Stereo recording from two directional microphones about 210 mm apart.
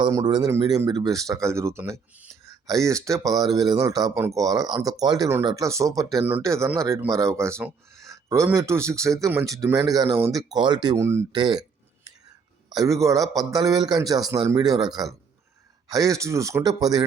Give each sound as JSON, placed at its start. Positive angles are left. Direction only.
{"t": 0.0, "sound": "speech", "side_deg": -20}
{"t": 12.7, "sound": "speech", "side_deg": -15}
{"t": 15.9, "sound": "speech", "side_deg": -15}